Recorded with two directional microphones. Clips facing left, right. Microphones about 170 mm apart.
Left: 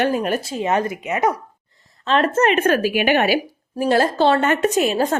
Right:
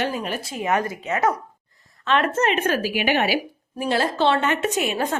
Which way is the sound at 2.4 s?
55° left (ahead or behind).